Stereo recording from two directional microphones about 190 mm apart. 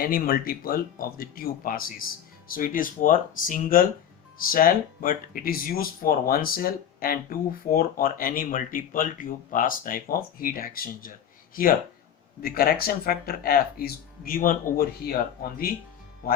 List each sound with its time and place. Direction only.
0.0 s speech: 50° left (ahead or behind)
16.2 s speech: 50° left (ahead or behind)